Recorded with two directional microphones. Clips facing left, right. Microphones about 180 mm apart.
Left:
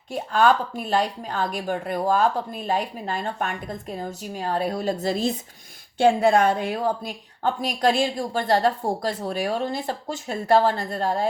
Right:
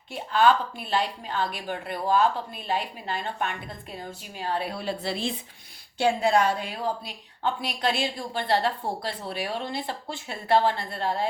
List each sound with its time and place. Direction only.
0.1 s a woman's voice: 45° left (ahead or behind)
6.0 s a woman's voice: 55° left (ahead or behind)